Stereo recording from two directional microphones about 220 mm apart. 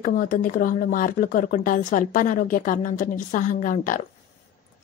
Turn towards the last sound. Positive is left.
turn(degrees=35)  # may be behind; listen again after turning